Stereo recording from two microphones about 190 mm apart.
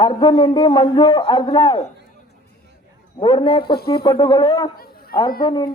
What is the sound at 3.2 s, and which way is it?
Speech, 25° left (ahead or behind).